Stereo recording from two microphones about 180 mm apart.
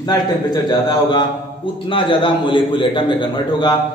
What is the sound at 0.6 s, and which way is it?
A man's voice, 25° left (ahead or behind).